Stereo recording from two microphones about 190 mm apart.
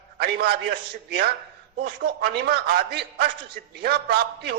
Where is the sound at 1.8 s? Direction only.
60° right (ahead or behind).